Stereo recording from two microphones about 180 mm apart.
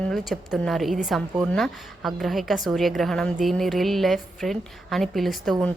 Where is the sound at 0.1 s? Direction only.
Centre (ahead or behind).